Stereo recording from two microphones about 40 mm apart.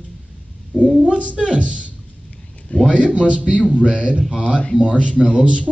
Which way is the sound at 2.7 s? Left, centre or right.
Left.